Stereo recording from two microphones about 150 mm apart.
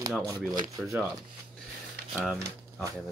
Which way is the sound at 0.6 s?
25° right (ahead or behind).